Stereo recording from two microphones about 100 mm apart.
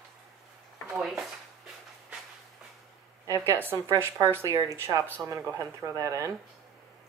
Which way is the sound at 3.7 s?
30° right (ahead or behind).